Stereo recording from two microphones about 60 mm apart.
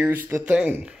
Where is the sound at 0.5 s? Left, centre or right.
Centre.